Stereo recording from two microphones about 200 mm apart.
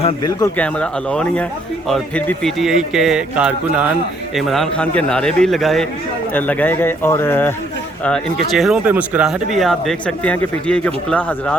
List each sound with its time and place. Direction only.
0.0 s speech: 20° left (ahead or behind)
0.5 s speech: 5° left (ahead or behind)